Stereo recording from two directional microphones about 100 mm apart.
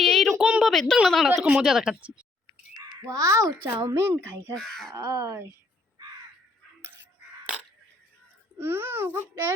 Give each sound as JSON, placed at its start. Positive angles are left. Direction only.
{"t": 0.0, "sound": "a sound", "side_deg": 5}
{"t": 0.6, "sound": "a woman's voice", "side_deg": 5}
{"t": 3.1, "sound": "a child's voice", "side_deg": -35}
{"t": 4.5, "sound": "speech", "side_deg": 5}
{"t": 4.9, "sound": "speech", "side_deg": -30}
{"t": 8.5, "sound": "a child's voice", "side_deg": -25}
{"t": 9.3, "sound": "speech", "side_deg": -35}